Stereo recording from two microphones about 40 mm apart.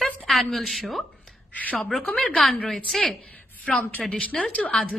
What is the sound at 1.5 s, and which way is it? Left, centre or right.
Speech, left.